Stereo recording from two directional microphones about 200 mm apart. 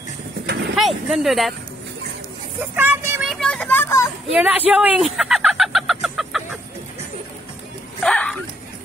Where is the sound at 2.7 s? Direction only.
10° right (ahead or behind); by 4.0 s 10° left (ahead or behind).